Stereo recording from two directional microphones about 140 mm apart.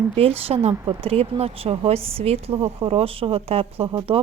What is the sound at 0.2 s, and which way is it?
Speech, 45° right (ahead or behind).